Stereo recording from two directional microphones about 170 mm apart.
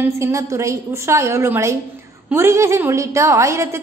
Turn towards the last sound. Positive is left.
turn(degrees=-15)  # may be behind; listen again after turning